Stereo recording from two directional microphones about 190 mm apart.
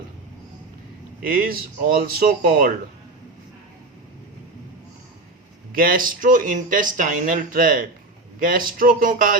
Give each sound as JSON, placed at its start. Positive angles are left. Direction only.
{"t": 1.2, "sound": "speech", "side_deg": -50}
{"t": 5.7, "sound": "speech", "side_deg": -50}